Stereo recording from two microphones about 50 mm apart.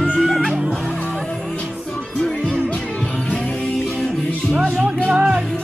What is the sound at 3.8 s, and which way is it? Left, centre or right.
Music, centre.